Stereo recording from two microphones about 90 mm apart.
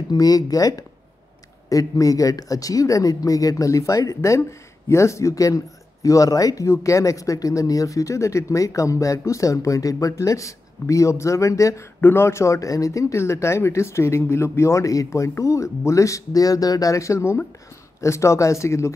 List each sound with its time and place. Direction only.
0.1 s speech: 45° left (ahead or behind)